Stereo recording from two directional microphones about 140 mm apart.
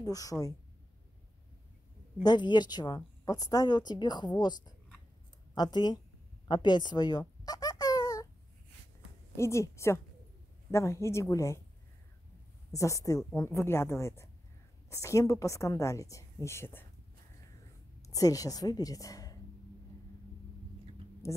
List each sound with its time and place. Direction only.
0.0 s a woman's voice: 25° left (ahead or behind)
2.2 s a woman's voice: 30° left (ahead or behind)
6.4 s a sound: 30° left (ahead or behind)
9.4 s a woman's voice: 20° left (ahead or behind)
12.7 s a woman's voice: 20° left (ahead or behind)
18.0 s a woman's voice: 25° left (ahead or behind)